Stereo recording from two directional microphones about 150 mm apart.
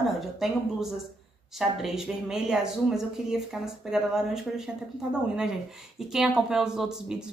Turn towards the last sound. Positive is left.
turn(degrees=-5)  # may be behind; listen again after turning